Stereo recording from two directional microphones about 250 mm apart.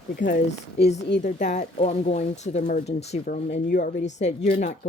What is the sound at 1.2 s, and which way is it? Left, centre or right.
Speech, left.